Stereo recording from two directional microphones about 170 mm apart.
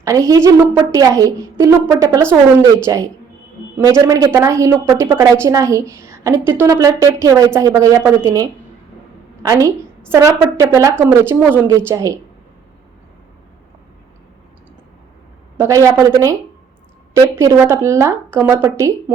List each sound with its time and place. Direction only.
0.0 s a woman's voice: 20° right (ahead or behind)
15.5 s a woman's voice: 15° right (ahead or behind)